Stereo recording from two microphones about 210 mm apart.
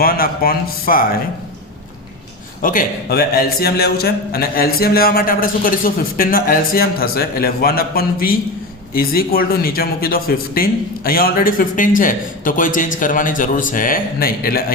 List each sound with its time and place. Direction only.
0.0 s a man's voice: 45° left (ahead or behind)
2.6 s a man's voice: 40° left (ahead or behind)